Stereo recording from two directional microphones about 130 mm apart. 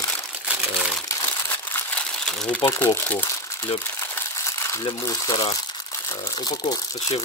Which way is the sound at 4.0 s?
20° left (ahead or behind).